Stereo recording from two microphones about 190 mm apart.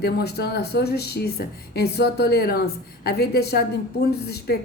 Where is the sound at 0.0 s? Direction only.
55° left (ahead or behind).